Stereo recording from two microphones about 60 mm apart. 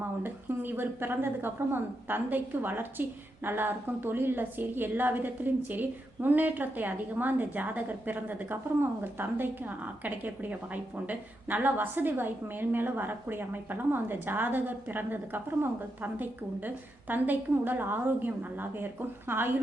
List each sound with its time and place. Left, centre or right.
0.0 s speech: right